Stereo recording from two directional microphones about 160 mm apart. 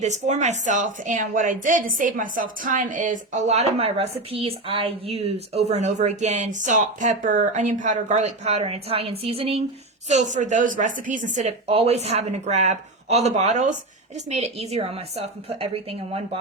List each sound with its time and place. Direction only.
0.0 s a woman's voice: 45° right (ahead or behind)
10.1 s a woman's voice: 50° right (ahead or behind)